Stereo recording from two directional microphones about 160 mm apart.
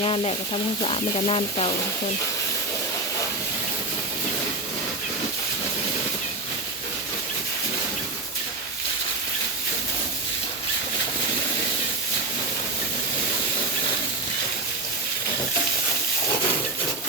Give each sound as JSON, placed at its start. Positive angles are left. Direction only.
{"t": 0.0, "sound": "frying", "side_deg": 35}